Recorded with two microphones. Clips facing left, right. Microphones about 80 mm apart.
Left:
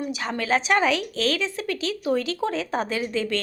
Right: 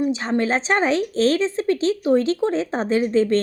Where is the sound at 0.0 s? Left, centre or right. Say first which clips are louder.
Right 8 dB; right.